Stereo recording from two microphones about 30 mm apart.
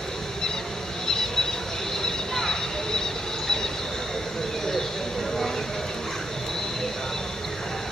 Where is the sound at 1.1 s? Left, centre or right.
Left.